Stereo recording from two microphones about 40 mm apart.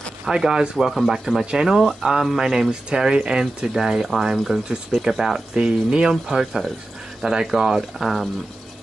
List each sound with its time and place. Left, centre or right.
0.3 s speech: centre
1.4 s speech: right
5.6 s speech: right
6.2 s speech: centre